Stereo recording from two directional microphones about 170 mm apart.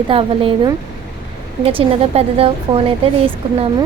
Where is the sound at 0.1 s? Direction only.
30° right (ahead or behind).